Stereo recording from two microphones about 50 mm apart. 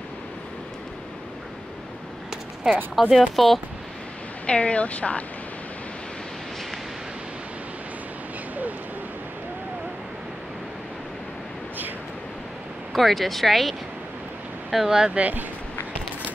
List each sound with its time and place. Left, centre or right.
3.0 s speech: centre
4.5 s speech: left
12.9 s speech: centre
15.1 s speech: right